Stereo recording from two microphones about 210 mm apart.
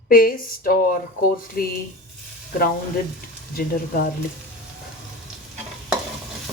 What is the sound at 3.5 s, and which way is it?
Speech, 45° left (ahead or behind).